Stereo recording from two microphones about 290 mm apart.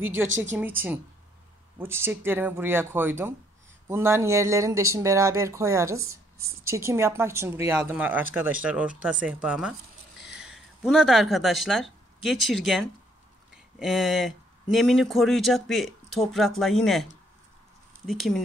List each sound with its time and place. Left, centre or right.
0.4 s speech: centre